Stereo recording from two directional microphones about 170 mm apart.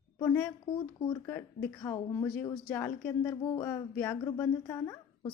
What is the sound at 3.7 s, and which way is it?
A woman's voice, 15° left (ahead or behind).